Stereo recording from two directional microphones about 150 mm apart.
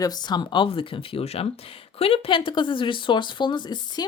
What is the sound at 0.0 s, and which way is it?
Speech, 25° left (ahead or behind).